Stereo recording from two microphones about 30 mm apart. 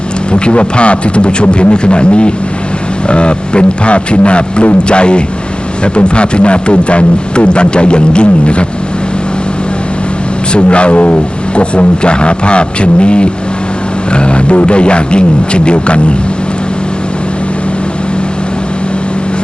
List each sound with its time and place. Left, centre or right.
0.3 s a man's voice: left
10.5 s a man's voice: left